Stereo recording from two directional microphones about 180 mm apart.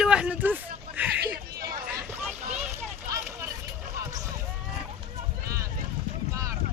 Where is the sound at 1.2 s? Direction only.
55° right (ahead or behind).